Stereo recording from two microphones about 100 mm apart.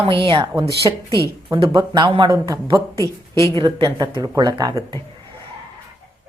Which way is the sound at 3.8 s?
45° right (ahead or behind).